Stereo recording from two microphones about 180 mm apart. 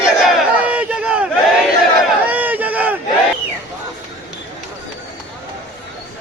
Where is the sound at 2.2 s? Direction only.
10° right (ahead or behind).